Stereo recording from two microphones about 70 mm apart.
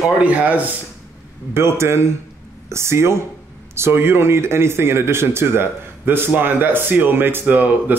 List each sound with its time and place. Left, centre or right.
0.2 s speech: right
1.5 s speech: right